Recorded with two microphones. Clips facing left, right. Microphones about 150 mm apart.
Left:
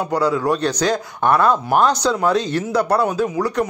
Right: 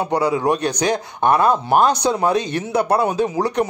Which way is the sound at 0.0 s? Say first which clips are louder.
Even; 20° right (ahead or behind).